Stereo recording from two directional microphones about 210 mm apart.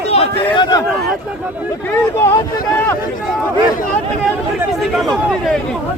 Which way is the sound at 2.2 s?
15° left (ahead or behind).